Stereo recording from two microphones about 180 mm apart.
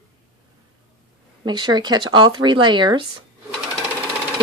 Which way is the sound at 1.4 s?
25° right (ahead or behind).